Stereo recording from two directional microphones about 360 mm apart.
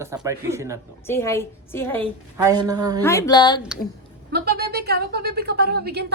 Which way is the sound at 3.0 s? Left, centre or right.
Centre.